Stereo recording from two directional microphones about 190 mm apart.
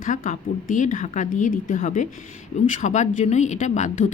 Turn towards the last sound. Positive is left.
turn(degrees=40)  # may be behind; listen again after turning